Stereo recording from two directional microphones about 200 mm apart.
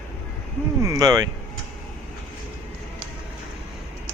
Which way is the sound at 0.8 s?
15° right (ahead or behind).